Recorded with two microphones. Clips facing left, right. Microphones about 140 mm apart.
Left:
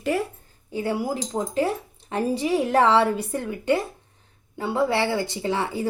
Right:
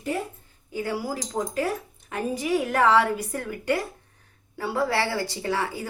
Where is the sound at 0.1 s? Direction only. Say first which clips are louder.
Left 3 dB; 85° left.